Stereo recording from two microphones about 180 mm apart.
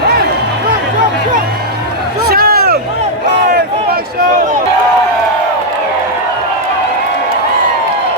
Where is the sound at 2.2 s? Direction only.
60° right (ahead or behind).